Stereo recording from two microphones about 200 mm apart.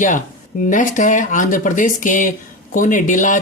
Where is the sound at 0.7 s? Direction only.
40° left (ahead or behind).